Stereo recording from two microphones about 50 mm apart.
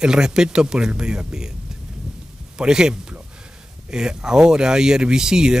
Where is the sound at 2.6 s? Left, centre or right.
Centre.